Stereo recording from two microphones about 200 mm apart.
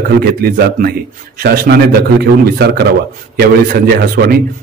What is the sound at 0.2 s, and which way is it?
A man's voice, 50° right (ahead or behind).